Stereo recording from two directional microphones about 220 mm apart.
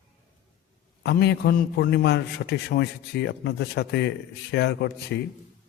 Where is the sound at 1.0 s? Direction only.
50° left (ahead or behind).